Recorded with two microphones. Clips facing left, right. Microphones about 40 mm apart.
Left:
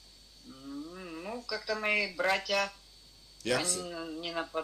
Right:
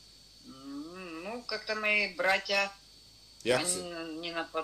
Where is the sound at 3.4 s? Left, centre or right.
Centre.